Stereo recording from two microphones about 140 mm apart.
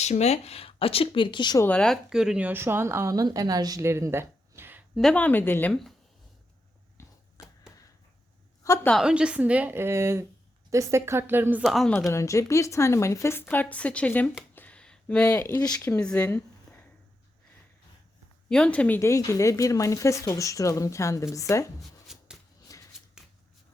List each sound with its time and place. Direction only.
0.0 s speech: 50° left (ahead or behind); by 1.6 s 30° left (ahead or behind)
1.6 s a woman's voice: 5° left (ahead or behind); by 4.8 s 15° right (ahead or behind)
4.9 s speech: 5° left (ahead or behind)
7.0 s a sound: 20° left (ahead or behind)
8.6 s a woman's voice: 20° left (ahead or behind)
8.9 s a woman's voice: 5° right (ahead or behind)
11.6 s speech: centre (ahead or behind)
12.1 s speech: 20° left (ahead or behind)
14.5 s a sound: 10° left (ahead or behind)
15.6 s speech: 15° left (ahead or behind)
18.4 s speech: 5° left (ahead or behind)
18.9 s speech: 20° left (ahead or behind)
21.8 s shuffling cards: centre (ahead or behind)
22.7 s shuffling cards: 25° left (ahead or behind)